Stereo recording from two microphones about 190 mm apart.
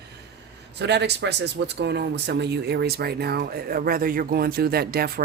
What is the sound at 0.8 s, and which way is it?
Speech, 65° right (ahead or behind).